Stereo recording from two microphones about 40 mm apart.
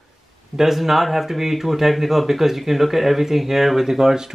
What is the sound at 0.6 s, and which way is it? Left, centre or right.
Speech, centre.